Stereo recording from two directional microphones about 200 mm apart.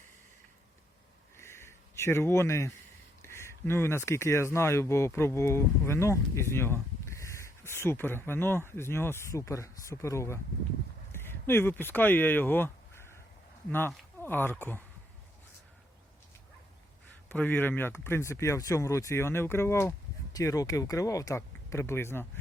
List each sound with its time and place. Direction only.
1.4 s a sound: 15° left (ahead or behind)
3.2 s speech: 15° left (ahead or behind)
17.3 s speech: 10° left (ahead or behind)